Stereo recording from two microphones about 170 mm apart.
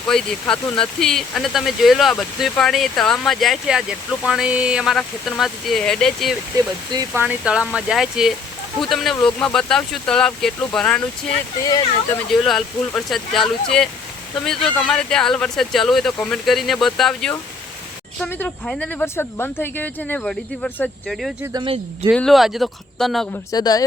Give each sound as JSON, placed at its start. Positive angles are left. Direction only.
{"t": 0.1, "sound": "speech", "side_deg": 5}
{"t": 7.1, "sound": "speech", "side_deg": -10}
{"t": 11.6, "sound": "speech", "side_deg": 20}
{"t": 12.3, "sound": "speech", "side_deg": 5}
{"t": 21.1, "sound": "speech", "side_deg": 0}
{"t": 21.5, "sound": "speech", "side_deg": -30}
{"t": 22.1, "sound": "speech", "side_deg": 0}
{"t": 23.5, "sound": "speech", "side_deg": 20}